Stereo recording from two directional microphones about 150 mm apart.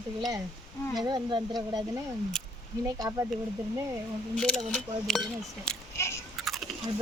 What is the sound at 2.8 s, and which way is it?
Speech, 20° right (ahead or behind).